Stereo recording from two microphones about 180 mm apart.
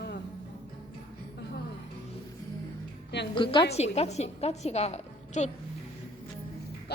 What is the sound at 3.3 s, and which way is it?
A woman's voice, 25° left (ahead or behind).